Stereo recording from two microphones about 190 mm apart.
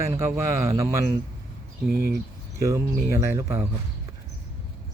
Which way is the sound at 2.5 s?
15° right (ahead or behind).